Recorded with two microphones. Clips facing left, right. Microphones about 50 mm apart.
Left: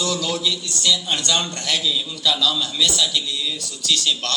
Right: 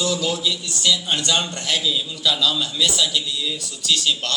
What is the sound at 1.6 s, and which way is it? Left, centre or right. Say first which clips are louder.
A man's voice: even; right.